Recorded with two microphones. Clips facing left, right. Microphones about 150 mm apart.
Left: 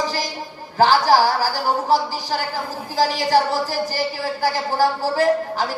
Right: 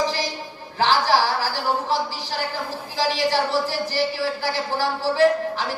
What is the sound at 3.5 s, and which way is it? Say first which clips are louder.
Speech: left 1 dB; 40° left (ahead or behind).